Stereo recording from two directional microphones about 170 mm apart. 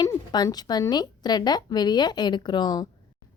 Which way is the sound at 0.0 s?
25° left (ahead or behind).